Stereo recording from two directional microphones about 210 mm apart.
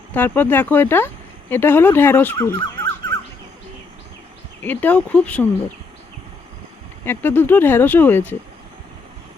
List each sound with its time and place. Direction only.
0.1 s speech: 10° left (ahead or behind)
4.6 s speech: 10° left (ahead or behind)
7.0 s speech: 10° left (ahead or behind)